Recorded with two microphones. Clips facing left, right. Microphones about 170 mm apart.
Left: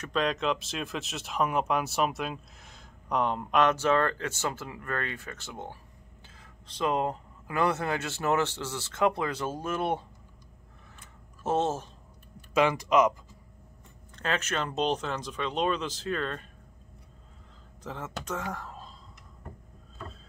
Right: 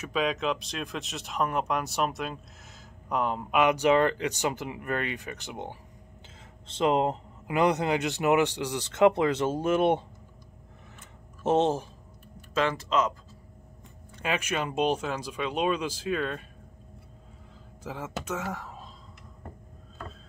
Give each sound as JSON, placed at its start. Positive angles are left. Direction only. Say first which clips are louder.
{"t": 0.0, "sound": "speech", "louder": "even", "side_deg": -5}
{"t": 11.4, "sound": "speech", "louder": "right 4 dB", "side_deg": -20}
{"t": 12.5, "sound": "speech", "louder": "left 3 dB", "side_deg": 15}
{"t": 14.1, "sound": "speech", "louder": "right 1 dB", "side_deg": -10}
{"t": 17.8, "sound": "speech", "louder": "right 2 dB", "side_deg": -10}